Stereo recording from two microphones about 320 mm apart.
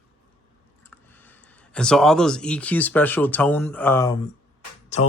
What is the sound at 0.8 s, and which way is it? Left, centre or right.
Speech, centre.